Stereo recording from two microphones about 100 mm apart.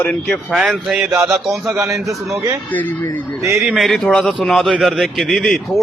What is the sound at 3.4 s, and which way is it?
Speech, 30° right (ahead or behind).